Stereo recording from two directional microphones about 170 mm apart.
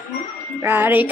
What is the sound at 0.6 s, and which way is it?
Music, 10° right (ahead or behind).